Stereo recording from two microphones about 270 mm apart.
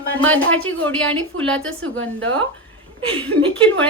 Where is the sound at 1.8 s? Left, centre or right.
Right.